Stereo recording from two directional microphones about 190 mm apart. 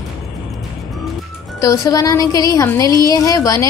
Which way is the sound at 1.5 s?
15° left (ahead or behind).